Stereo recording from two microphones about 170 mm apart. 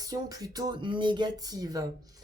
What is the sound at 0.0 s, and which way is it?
Speech, 20° right (ahead or behind).